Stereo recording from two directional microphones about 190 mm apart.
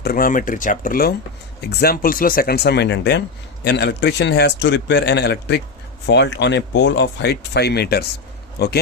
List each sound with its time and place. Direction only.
0.0 s speech: 50° left (ahead or behind)